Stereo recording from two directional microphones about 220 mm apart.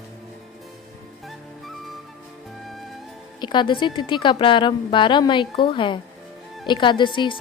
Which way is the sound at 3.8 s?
20° left (ahead or behind).